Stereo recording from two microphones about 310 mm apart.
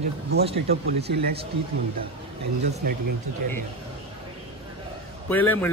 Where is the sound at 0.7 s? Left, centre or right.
Right.